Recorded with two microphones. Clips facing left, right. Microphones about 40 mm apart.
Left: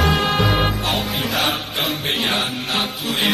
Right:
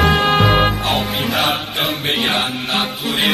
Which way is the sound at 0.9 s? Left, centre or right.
Centre.